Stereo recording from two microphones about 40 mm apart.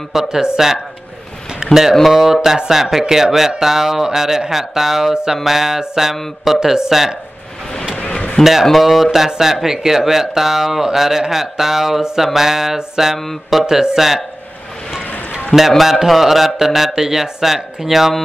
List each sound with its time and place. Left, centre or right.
0.1 s speech: centre
8.0 s a sound: left
8.7 s speech: centre
15.8 s speech: centre